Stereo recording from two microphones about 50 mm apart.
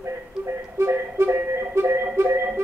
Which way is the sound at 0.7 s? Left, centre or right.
Right.